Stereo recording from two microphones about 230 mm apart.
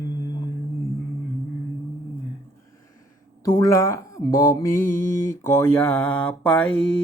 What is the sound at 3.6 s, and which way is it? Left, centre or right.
Speech, centre.